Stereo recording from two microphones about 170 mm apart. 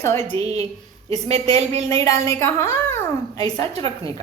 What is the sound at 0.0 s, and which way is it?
Speech, 15° left (ahead or behind).